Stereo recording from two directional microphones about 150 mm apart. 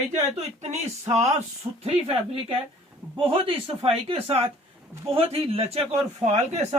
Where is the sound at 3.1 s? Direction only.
35° right (ahead or behind).